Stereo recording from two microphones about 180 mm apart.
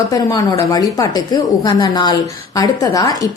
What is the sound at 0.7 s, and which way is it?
A woman's voice, 20° left (ahead or behind).